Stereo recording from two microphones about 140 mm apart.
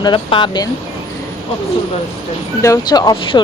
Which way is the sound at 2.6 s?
25° left (ahead or behind).